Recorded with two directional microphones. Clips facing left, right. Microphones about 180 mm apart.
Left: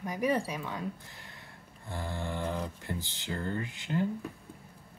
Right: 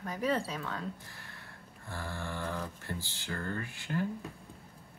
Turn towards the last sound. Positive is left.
turn(degrees=20)  # may be behind; listen again after turning